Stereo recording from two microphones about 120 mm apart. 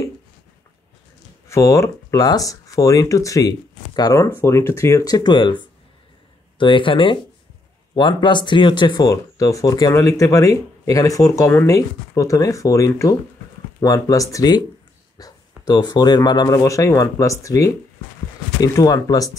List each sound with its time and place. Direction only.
1.5 s speech: 25° left (ahead or behind)
6.6 s speech: 45° left (ahead or behind)